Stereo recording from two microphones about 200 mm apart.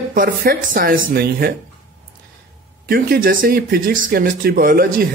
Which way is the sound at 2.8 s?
50° right (ahead or behind).